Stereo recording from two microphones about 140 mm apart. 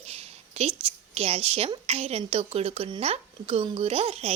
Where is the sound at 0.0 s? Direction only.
45° right (ahead or behind).